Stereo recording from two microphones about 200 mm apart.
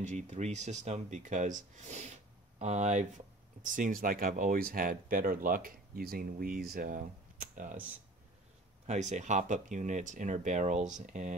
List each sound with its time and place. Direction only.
0.0 s speech: 35° right (ahead or behind)
8.8 s speech: 35° right (ahead or behind)